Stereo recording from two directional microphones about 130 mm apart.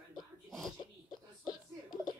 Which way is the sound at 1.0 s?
35° left (ahead or behind).